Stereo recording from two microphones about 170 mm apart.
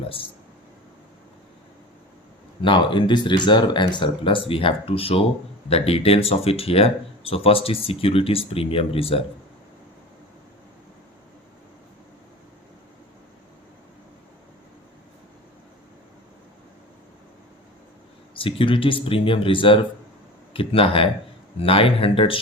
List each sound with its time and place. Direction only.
2.6 s speech: 30° left (ahead or behind)
18.3 s speech: 30° left (ahead or behind)